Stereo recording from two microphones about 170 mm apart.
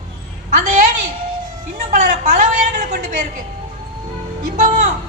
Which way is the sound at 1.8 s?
50° right (ahead or behind).